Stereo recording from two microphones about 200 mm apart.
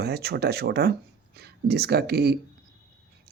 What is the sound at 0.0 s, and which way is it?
Speech, 55° right (ahead or behind).